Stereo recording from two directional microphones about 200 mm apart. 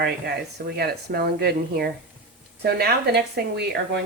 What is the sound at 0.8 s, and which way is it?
Speech, 50° right (ahead or behind).